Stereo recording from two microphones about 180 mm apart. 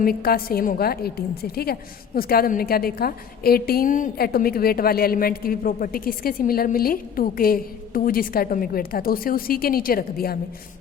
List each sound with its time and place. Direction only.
0.0 s a woman's voice: 55° left (ahead or behind)